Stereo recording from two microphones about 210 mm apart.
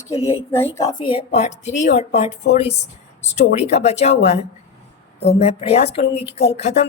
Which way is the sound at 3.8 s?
30° left (ahead or behind).